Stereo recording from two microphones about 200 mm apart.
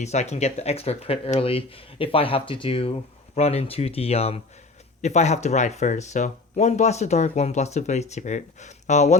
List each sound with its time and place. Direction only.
0.0 s speech: 35° left (ahead or behind)